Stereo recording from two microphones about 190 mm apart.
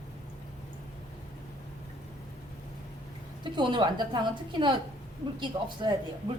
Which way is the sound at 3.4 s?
25° right (ahead or behind).